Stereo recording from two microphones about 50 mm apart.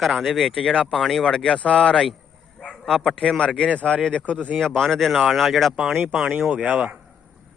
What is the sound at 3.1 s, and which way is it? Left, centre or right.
Speech, centre.